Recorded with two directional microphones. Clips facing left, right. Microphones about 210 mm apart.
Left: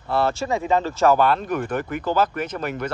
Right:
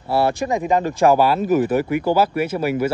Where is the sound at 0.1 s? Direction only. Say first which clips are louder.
Right 3 dB; 15° right (ahead or behind).